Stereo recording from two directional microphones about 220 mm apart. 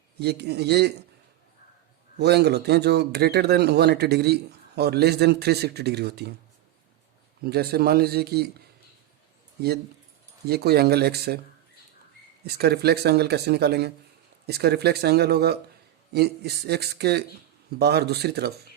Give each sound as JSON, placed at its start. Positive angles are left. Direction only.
{"t": 0.2, "sound": "speech", "side_deg": -50}
{"t": 2.1, "sound": "speech", "side_deg": -50}
{"t": 7.4, "sound": "speech", "side_deg": -45}
{"t": 9.6, "sound": "speech", "side_deg": -45}
{"t": 12.5, "sound": "speech", "side_deg": -45}